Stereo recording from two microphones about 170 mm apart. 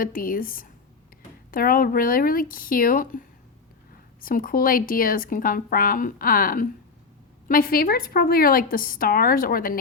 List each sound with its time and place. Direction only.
0.0 s speech: 55° left (ahead or behind)